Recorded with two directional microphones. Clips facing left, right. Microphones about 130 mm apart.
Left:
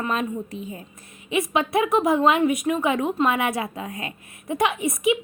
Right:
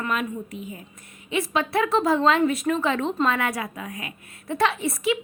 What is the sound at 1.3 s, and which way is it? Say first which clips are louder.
A woman's voice: left 2 dB; 20° left (ahead or behind).